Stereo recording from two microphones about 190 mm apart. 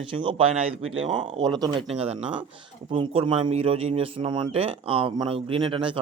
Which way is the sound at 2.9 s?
30° right (ahead or behind).